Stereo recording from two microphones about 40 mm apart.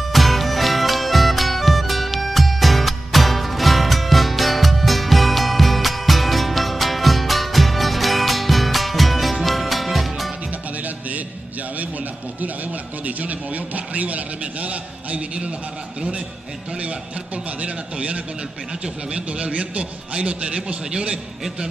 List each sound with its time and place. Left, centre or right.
0.1 s music: centre
13.0 s a sound: right
17.6 s a man's voice: right